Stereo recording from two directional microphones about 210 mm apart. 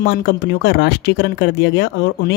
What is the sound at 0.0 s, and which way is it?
Speech, 50° left (ahead or behind).